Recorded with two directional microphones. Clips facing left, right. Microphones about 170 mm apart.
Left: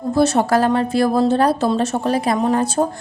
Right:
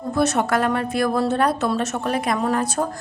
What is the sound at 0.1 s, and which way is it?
A woman's voice, 30° left (ahead or behind).